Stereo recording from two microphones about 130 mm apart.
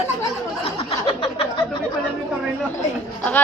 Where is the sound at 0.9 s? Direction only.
45° left (ahead or behind).